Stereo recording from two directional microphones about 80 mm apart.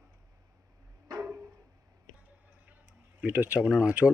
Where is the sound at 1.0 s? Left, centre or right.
Right.